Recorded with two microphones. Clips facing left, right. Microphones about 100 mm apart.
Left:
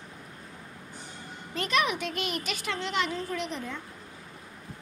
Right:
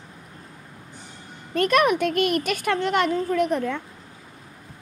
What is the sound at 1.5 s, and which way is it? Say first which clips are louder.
A woman's voice: right 9 dB; 55° right (ahead or behind).